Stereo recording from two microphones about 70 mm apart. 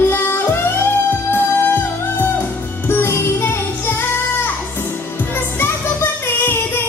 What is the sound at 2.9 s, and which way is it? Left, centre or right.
Music, left.